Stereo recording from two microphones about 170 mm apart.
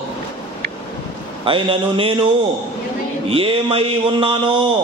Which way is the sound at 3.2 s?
35° right (ahead or behind).